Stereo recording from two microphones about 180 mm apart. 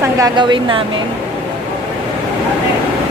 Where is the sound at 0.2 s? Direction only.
25° right (ahead or behind).